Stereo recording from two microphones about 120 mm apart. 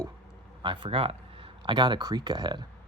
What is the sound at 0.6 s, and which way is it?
Speech, 45° right (ahead or behind).